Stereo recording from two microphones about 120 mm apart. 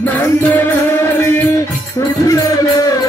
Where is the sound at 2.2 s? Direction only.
30° left (ahead or behind).